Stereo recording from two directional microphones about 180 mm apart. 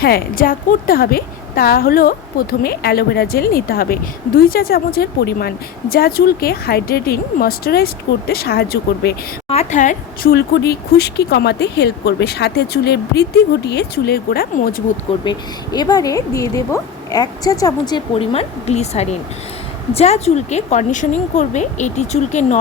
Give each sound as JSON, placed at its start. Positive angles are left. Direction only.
{"t": 0.0, "sound": "a woman's voice", "side_deg": 55}
{"t": 9.5, "sound": "speech", "side_deg": 40}
{"t": 10.3, "sound": "a woman's voice", "side_deg": 65}
{"t": 15.2, "sound": "speech", "side_deg": 25}